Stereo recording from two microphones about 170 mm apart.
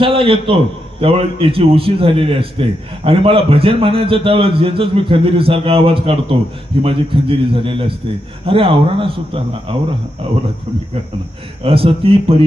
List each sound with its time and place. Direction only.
0.0 s a man's voice: 30° right (ahead or behind)
11.6 s a man's voice: 35° right (ahead or behind)